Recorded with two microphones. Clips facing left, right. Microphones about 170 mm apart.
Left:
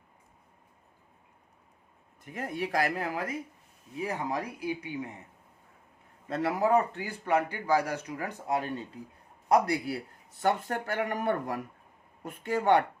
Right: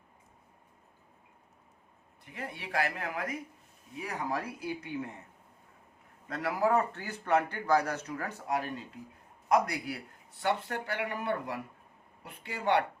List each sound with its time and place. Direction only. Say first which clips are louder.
2.2 s speech: left 8 dB; 45° left (ahead or behind)
4.0 s speech: left 3 dB; 15° left (ahead or behind)
6.2 s speech: left 2 dB; 25° left (ahead or behind)
9.5 s a man's voice: left 3 dB; 30° left (ahead or behind)
10.3 s speech: left 3 dB; 45° left (ahead or behind)